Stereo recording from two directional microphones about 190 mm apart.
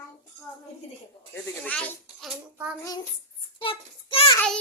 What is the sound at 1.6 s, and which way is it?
Speech, 5° left (ahead or behind).